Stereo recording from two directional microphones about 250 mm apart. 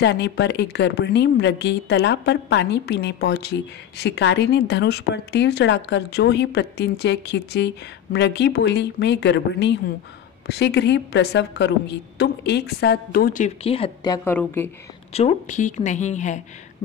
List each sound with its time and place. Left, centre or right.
0.0 s a woman's voice: left; by 14.7 s centre
15.1 s speech: left